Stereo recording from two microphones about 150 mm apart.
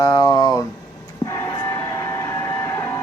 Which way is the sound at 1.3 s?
25° left (ahead or behind).